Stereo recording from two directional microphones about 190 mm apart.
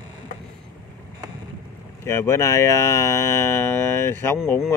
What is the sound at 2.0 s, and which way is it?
Speech, 15° left (ahead or behind).